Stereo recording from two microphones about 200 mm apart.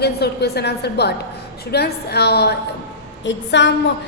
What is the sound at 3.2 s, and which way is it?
Speech, 65° left (ahead or behind).